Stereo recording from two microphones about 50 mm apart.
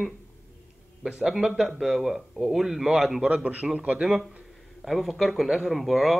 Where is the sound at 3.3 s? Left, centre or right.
Right.